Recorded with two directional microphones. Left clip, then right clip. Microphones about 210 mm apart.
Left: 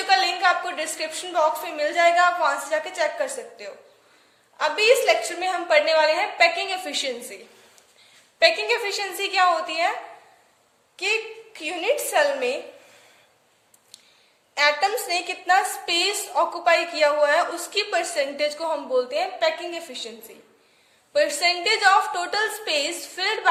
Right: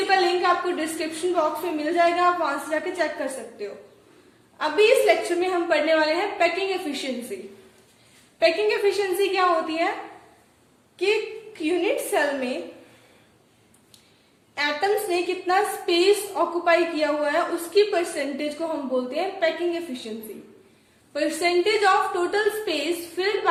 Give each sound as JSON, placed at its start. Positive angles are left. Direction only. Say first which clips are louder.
{"t": 0.1, "sound": "a woman's voice", "louder": "left 2 dB", "side_deg": 50}
{"t": 8.4, "sound": "a woman's voice", "louder": "left 1 dB", "side_deg": 50}
{"t": 11.0, "sound": "a woman's voice", "louder": "right 1 dB", "side_deg": 50}
{"t": 14.5, "sound": "a woman's voice", "louder": "left 3 dB", "side_deg": 50}
{"t": 21.1, "sound": "a woman's voice", "louder": "left 3 dB", "side_deg": 50}